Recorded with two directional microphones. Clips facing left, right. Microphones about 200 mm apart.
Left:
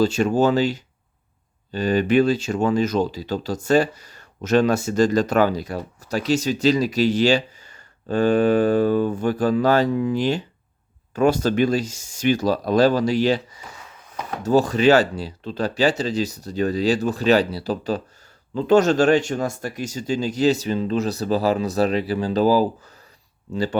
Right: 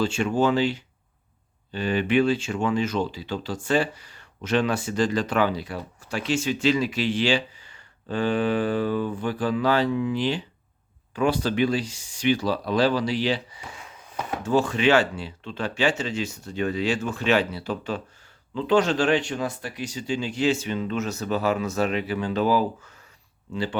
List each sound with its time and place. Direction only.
0.0 s speech: 40° left (ahead or behind)